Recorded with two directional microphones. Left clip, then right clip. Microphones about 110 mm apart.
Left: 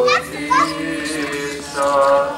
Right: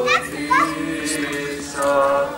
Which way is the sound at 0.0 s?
20° left (ahead or behind).